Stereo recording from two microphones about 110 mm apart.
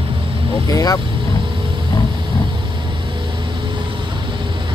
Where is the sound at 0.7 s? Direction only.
35° left (ahead or behind).